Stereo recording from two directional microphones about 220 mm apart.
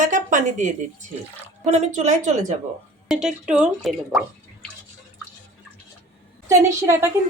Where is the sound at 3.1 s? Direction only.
5° right (ahead or behind).